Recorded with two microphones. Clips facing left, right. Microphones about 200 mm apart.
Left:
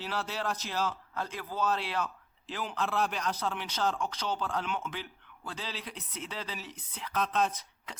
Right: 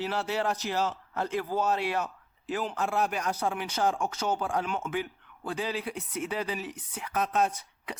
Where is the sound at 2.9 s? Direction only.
50° right (ahead or behind).